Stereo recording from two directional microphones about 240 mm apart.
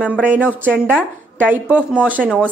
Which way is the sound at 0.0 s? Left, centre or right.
Centre.